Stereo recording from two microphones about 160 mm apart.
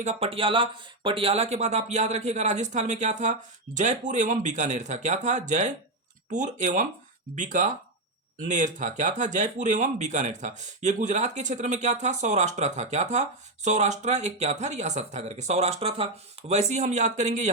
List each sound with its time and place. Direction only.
0.0 s speech: 40° right (ahead or behind)